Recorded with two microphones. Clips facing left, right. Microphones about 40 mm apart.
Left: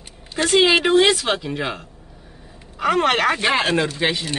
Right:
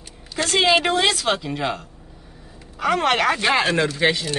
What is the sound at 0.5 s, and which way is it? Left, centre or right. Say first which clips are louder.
Speech: left 3 dB; centre.